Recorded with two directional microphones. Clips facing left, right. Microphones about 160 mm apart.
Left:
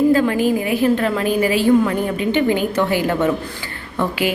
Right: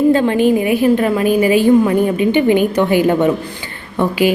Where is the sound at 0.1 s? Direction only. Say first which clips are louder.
Right 3 dB; 25° right (ahead or behind).